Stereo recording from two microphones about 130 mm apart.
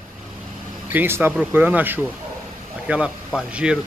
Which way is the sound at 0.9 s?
15° right (ahead or behind).